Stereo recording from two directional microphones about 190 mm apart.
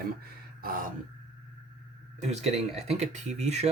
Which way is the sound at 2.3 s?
35° right (ahead or behind).